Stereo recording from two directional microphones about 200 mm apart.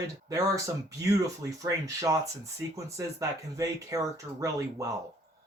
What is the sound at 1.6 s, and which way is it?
Speech, 15° right (ahead or behind).